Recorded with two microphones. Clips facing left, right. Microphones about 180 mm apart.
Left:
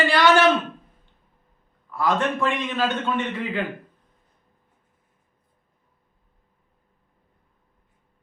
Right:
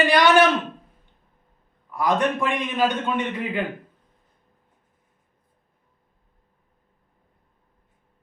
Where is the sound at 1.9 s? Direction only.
15° right (ahead or behind).